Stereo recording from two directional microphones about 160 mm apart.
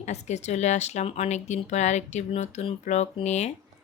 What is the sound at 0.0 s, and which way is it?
A woman's voice, 45° left (ahead or behind).